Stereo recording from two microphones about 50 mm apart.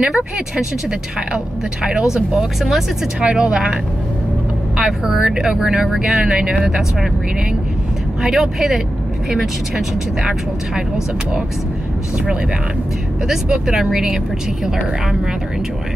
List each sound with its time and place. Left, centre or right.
0.0 s a woman's voice: centre
3.2 s a woman's voice: right
8.2 s a woman's voice: centre
13.3 s a woman's voice: centre